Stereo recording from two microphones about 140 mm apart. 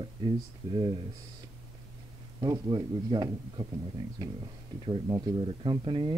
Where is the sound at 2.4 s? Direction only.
30° right (ahead or behind).